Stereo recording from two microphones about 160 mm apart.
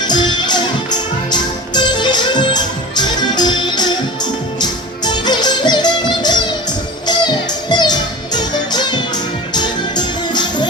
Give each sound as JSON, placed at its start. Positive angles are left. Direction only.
{"t": 0.1, "sound": "music", "side_deg": 25}